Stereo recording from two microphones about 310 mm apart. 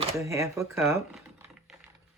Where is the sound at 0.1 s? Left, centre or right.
Centre.